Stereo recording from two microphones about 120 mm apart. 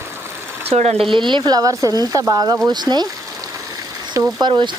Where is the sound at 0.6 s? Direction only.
60° right (ahead or behind).